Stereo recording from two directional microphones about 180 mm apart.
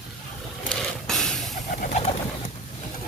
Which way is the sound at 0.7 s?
5° left (ahead or behind).